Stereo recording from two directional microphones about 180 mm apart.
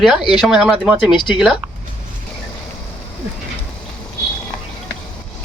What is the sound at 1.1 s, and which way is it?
Speech, 25° left (ahead or behind).